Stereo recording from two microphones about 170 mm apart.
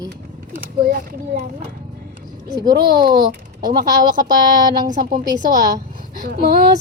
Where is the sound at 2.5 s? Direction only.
25° right (ahead or behind).